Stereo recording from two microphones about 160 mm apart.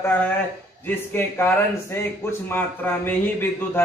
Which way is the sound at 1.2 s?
15° left (ahead or behind).